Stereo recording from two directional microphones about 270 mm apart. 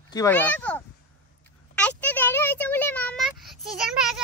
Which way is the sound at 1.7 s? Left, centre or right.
Centre.